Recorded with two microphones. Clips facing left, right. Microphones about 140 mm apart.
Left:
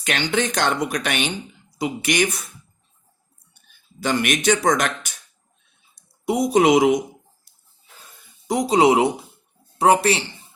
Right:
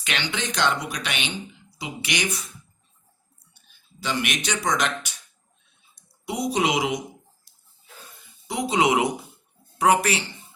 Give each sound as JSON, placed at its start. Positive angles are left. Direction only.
{"t": 0.0, "sound": "a man's voice", "side_deg": 45}
{"t": 4.0, "sound": "a man's voice", "side_deg": 50}
{"t": 8.4, "sound": "speech", "side_deg": 40}